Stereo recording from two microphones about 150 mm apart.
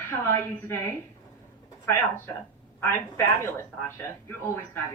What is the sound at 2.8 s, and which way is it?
Speech, 15° left (ahead or behind).